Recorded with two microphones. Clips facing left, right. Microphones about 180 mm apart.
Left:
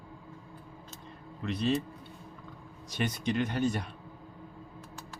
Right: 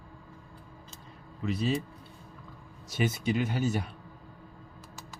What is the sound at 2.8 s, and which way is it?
Speech, 5° right (ahead or behind).